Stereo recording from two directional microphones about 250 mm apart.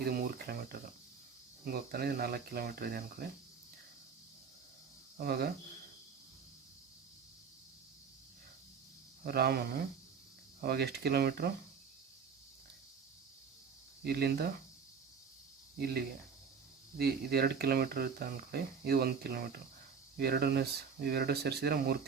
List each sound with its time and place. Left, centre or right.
0.0 s speech: right
5.1 s speech: right
9.2 s speech: right
14.0 s speech: right
15.8 s speech: right